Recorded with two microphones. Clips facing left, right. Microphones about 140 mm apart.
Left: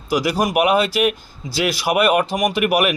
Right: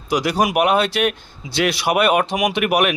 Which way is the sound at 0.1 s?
Centre (ahead or behind).